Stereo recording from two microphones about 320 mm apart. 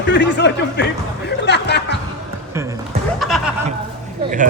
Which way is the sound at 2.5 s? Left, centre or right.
Centre.